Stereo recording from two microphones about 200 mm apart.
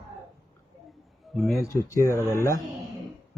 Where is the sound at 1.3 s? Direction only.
Centre (ahead or behind).